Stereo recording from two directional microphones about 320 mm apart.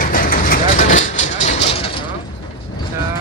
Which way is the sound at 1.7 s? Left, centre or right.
Centre.